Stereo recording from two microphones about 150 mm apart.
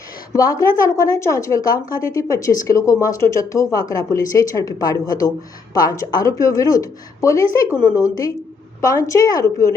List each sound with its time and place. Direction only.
0.3 s a woman's voice: 25° left (ahead or behind)